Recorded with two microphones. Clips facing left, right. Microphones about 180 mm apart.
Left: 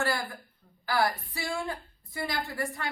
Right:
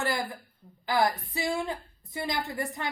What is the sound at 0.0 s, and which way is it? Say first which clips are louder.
A woman's voice: even; 20° right (ahead or behind).